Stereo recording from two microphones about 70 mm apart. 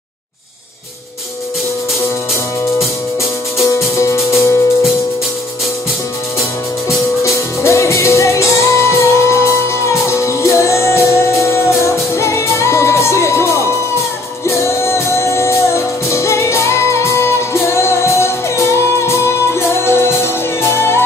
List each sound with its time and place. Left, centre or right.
3.6 s music: left
7.6 s music: left